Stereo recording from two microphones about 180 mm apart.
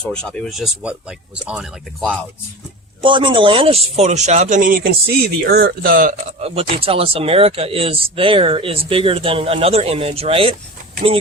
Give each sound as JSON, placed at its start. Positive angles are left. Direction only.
{"t": 0.0, "sound": "speech", "side_deg": 5}
{"t": 3.0, "sound": "speech", "side_deg": -30}
{"t": 6.4, "sound": "speech", "side_deg": -35}